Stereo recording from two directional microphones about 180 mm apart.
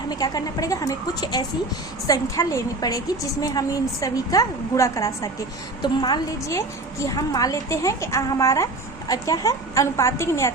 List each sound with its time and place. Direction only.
0.1 s a woman's voice: 20° left (ahead or behind)